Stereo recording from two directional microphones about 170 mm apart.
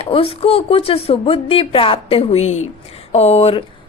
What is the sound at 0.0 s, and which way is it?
A woman's voice, 35° left (ahead or behind).